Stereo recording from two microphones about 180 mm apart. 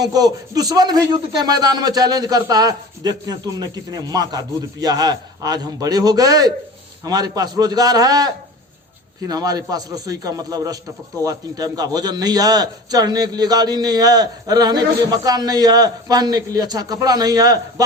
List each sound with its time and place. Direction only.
0.1 s a man's voice: 20° right (ahead or behind)